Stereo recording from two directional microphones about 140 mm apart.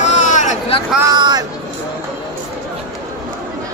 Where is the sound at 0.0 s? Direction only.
60° left (ahead or behind).